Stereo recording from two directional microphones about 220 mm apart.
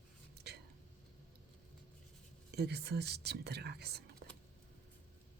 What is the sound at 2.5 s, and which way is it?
Speech, 50° right (ahead or behind).